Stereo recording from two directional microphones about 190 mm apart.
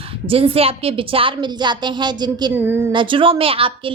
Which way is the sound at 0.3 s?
30° right (ahead or behind).